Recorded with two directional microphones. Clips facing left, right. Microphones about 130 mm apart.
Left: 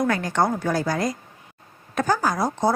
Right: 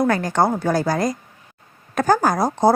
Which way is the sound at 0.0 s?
40° right (ahead or behind).